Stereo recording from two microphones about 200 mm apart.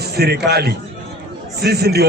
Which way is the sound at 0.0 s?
55° right (ahead or behind).